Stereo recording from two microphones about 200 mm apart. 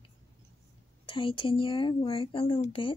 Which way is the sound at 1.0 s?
25° left (ahead or behind).